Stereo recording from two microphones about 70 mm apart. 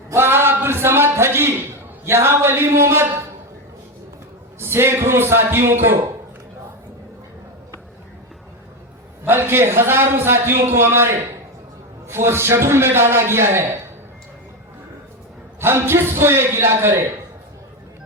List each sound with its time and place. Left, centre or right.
0.1 s a sound: right
2.0 s a man's voice: right
4.6 s a man's voice: right
9.2 s a man's voice: right
15.6 s a man's voice: right